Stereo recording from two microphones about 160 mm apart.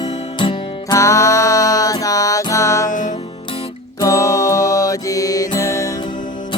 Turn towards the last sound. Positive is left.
turn(degrees=55)  # may be behind; listen again after turning